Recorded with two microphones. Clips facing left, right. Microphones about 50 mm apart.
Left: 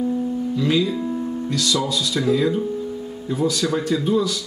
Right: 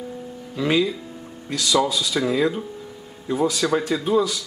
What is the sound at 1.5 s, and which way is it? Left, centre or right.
Speech, centre.